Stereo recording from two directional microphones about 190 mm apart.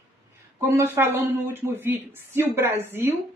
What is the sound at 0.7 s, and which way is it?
A woman's voice, 15° right (ahead or behind).